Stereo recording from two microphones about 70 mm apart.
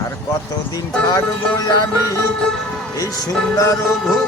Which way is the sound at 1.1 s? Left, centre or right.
Left.